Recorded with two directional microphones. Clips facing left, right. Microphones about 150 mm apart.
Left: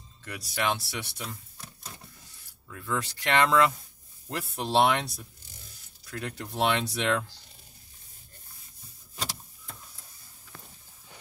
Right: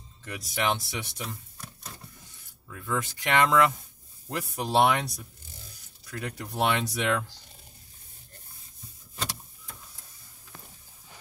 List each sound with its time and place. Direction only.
0.2 s speech: 20° right (ahead or behind)
2.7 s speech: 15° right (ahead or behind)